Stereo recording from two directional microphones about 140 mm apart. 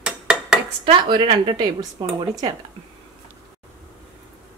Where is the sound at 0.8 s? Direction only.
35° right (ahead or behind).